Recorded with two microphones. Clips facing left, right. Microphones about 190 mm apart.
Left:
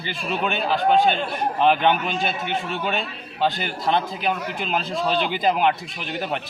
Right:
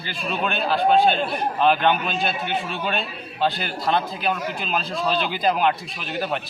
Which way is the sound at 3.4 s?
20° left (ahead or behind).